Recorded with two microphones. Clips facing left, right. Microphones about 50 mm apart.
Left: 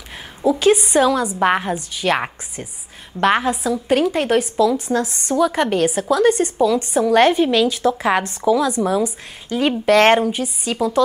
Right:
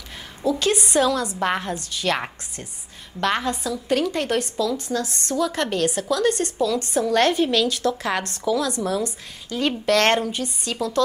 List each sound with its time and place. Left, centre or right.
0.5 s a woman's voice: centre
4.1 s a woman's voice: centre